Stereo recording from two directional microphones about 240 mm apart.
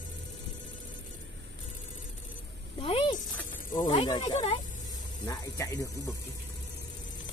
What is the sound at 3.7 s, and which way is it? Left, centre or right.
Speech, left.